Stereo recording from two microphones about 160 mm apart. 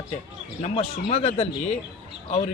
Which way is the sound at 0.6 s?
40° left (ahead or behind).